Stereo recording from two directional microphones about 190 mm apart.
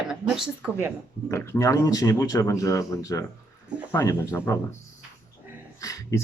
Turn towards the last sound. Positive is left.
turn(degrees=15)  # may be behind; listen again after turning